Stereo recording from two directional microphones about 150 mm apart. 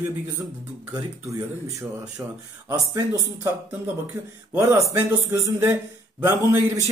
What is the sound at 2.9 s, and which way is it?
Speech, 20° right (ahead or behind).